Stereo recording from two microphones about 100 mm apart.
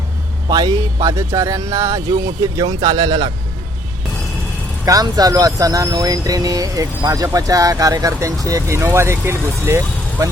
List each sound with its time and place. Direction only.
0.4 s speech: 45° right (ahead or behind)
4.9 s speech: 40° right (ahead or behind)